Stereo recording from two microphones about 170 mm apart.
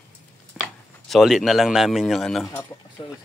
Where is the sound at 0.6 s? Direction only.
Centre (ahead or behind).